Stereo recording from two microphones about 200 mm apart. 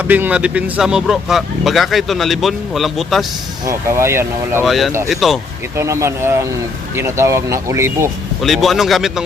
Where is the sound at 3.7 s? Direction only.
15° right (ahead or behind).